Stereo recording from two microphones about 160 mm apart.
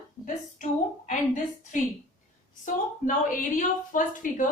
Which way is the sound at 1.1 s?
50° left (ahead or behind).